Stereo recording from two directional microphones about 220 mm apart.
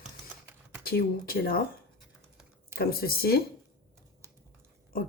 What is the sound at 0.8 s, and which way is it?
Speech, 45° left (ahead or behind).